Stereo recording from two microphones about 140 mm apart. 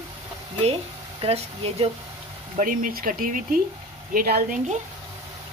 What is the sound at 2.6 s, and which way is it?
Speech, 75° right (ahead or behind).